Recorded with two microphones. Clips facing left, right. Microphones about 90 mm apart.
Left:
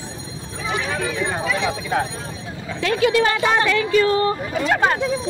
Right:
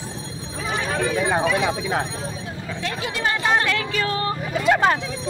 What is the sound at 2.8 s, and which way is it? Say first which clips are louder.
Speech: left 9 dB; 85° left.